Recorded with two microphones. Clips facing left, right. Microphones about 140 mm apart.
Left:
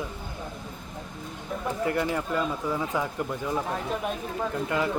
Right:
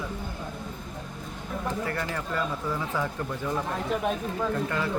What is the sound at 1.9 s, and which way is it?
Speech, 15° left (ahead or behind).